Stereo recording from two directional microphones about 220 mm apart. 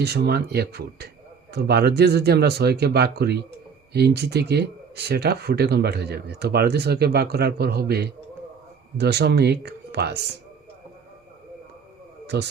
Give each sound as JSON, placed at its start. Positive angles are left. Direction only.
{"t": 0.0, "sound": "speech", "side_deg": -45}
{"t": 12.2, "sound": "a man's voice", "side_deg": -50}